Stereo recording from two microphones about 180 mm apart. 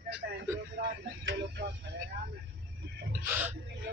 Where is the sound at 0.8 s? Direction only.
65° right (ahead or behind).